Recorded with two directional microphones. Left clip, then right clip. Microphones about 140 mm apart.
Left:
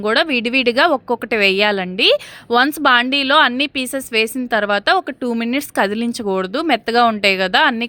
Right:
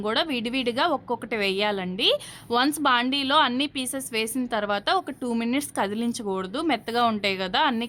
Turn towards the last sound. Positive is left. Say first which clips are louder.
# left 9 dB
turn(degrees=30)  # may be behind; listen again after turning